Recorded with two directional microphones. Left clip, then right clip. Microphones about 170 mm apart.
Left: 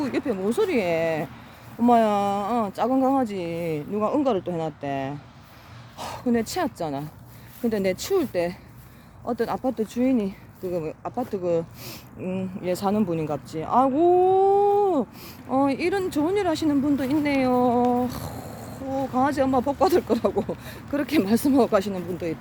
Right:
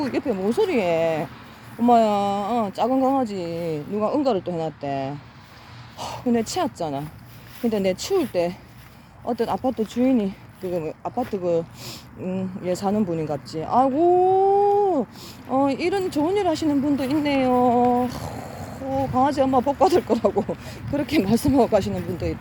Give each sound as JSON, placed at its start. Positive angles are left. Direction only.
{"t": 0.0, "sound": "speech", "side_deg": -15}
{"t": 1.8, "sound": "speech", "side_deg": -5}